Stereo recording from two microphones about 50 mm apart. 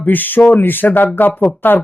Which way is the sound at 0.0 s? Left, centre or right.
Left.